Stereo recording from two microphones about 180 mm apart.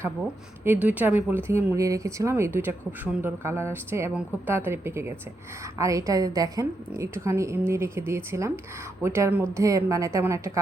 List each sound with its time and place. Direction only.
0.6 s speech: 10° right (ahead or behind)